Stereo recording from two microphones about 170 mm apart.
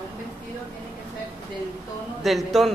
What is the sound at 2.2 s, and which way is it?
Speech, centre (ahead or behind).